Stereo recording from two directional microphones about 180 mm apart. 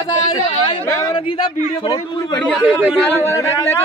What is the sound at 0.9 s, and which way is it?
Speech, 20° left (ahead or behind).